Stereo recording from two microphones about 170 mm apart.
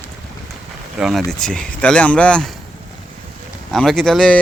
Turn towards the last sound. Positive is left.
turn(degrees=5)  # may be behind; listen again after turning